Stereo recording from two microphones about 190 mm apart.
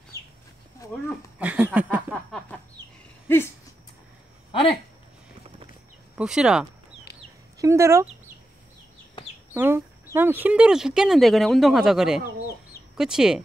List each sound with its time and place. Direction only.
1.0 s speech: 5° right (ahead or behind)
3.3 s a sound: 10° left (ahead or behind)
4.5 s speech: 30° left (ahead or behind)
6.1 s speech: 5° right (ahead or behind)
7.5 s speech: 15° right (ahead or behind)
9.5 s speech: 10° right (ahead or behind)